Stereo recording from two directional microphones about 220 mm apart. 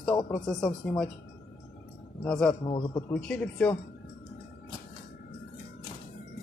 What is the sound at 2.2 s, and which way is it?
Speech, 5° left (ahead or behind).